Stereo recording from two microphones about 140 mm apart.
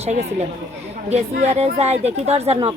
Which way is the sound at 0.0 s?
55° right (ahead or behind).